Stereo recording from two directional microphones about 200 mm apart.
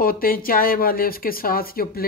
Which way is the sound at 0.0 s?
45° left (ahead or behind).